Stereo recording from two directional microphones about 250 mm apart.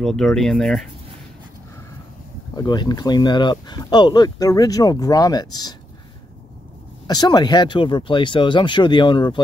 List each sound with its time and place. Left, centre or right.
0.0 s speech: centre
2.5 s speech: centre
7.1 s speech: centre